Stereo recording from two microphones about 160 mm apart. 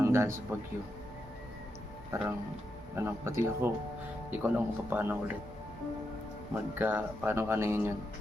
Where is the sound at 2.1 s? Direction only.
20° right (ahead or behind).